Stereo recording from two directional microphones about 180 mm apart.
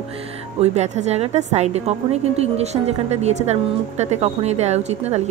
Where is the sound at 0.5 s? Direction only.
40° right (ahead or behind).